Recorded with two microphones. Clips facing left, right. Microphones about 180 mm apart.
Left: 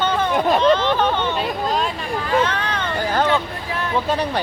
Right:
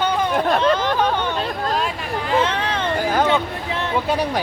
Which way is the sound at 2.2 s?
30° right (ahead or behind).